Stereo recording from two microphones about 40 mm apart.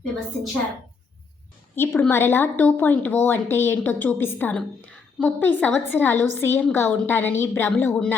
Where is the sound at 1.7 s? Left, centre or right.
Left.